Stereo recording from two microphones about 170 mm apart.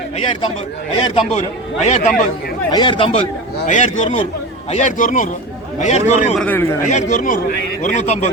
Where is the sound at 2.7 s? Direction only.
25° left (ahead or behind).